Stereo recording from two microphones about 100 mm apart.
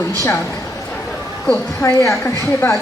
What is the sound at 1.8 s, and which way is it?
A woman's voice, 30° left (ahead or behind).